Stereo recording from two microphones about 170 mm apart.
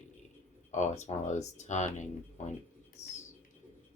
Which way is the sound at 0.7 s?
45° left (ahead or behind).